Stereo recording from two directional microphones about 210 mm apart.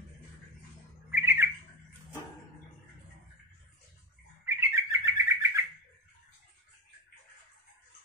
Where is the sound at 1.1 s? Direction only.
10° right (ahead or behind).